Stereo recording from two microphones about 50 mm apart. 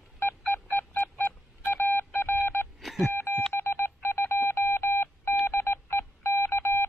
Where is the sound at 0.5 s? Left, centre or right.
Left.